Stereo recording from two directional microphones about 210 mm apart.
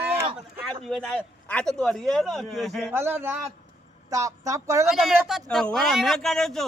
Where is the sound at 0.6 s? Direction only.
Centre (ahead or behind).